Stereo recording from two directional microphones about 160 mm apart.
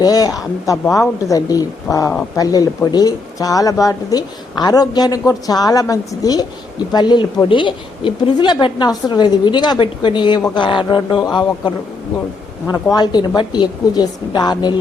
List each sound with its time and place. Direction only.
0.0 s speech: 25° left (ahead or behind)
12.6 s speech: 25° left (ahead or behind)